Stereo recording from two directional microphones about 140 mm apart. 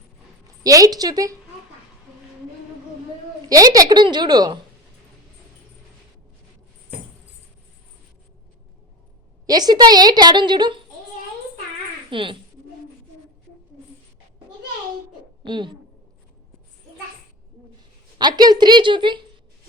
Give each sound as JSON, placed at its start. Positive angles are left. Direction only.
{"t": 0.6, "sound": "a woman's voice", "side_deg": -25}
{"t": 3.5, "sound": "a woman's voice", "side_deg": -25}
{"t": 9.5, "sound": "a woman's voice", "side_deg": -30}
{"t": 12.1, "sound": "a woman's voice", "side_deg": -35}
{"t": 15.4, "sound": "a woman's voice", "side_deg": -35}
{"t": 18.2, "sound": "a woman's voice", "side_deg": -30}